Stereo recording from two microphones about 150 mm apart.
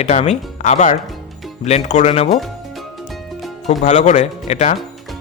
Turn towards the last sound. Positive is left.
turn(degrees=50)  # may be behind; listen again after turning